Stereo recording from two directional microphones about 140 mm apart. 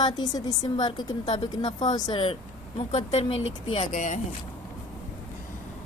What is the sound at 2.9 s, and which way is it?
Speech, 50° left (ahead or behind).